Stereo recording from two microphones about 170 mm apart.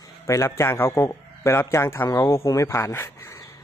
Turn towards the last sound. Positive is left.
turn(degrees=20)  # may be behind; listen again after turning